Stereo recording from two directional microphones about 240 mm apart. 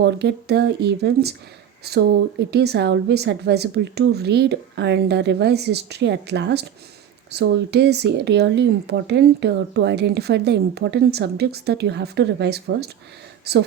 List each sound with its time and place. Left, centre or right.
0.0 s speech: right